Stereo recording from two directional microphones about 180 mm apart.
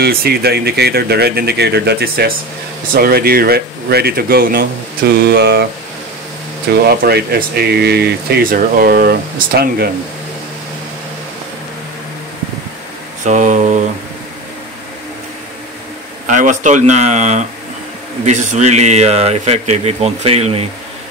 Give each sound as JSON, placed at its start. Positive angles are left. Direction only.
{"t": 0.0, "sound": "speech", "side_deg": -60}
{"t": 6.9, "sound": "speech", "side_deg": -60}
{"t": 13.2, "sound": "mantra", "side_deg": -45}
{"t": 16.3, "sound": "speech", "side_deg": -45}